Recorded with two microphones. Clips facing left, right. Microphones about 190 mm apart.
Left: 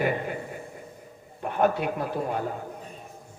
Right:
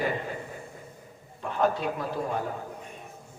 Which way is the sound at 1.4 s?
55° left (ahead or behind).